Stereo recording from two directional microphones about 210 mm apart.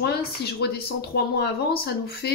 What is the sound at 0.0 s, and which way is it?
Speech, 50° left (ahead or behind).